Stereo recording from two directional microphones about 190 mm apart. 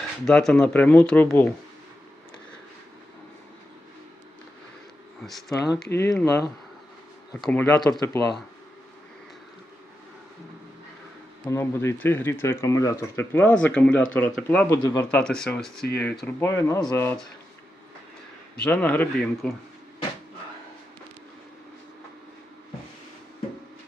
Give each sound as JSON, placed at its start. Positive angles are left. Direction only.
{"t": 0.3, "sound": "speech", "side_deg": 5}
{"t": 5.2, "sound": "speech", "side_deg": 0}
{"t": 5.6, "sound": "speech", "side_deg": 15}
{"t": 11.4, "sound": "speech", "side_deg": 15}
{"t": 18.6, "sound": "speech", "side_deg": 5}